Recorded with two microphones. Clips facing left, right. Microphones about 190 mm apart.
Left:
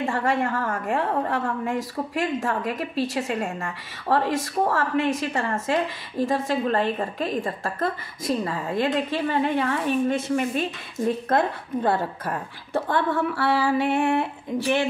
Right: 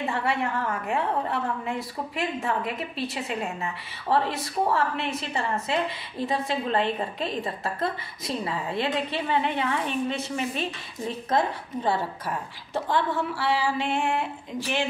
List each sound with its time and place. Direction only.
0.0 s a woman's voice: 45° left (ahead or behind)